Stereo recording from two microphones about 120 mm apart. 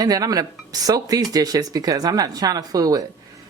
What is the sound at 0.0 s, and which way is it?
Speech, 30° right (ahead or behind).